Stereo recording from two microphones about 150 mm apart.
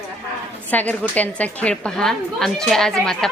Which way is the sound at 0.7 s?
10° left (ahead or behind).